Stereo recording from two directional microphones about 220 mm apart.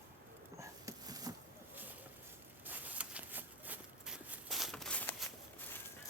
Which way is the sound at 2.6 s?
5° right (ahead or behind).